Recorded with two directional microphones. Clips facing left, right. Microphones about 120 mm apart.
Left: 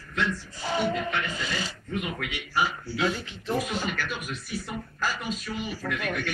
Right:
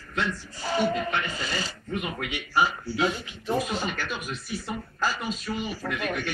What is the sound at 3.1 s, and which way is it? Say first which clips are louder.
Speech: right 1 dB; 20° right (ahead or behind).